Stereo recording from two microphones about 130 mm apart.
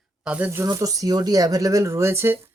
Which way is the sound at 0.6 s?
30° right (ahead or behind).